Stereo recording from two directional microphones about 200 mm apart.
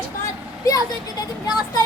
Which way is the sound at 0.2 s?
15° left (ahead or behind).